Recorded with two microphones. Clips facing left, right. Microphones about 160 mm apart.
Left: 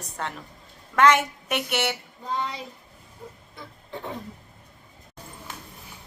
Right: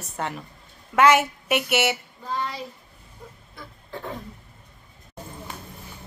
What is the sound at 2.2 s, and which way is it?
Speech, 20° left (ahead or behind).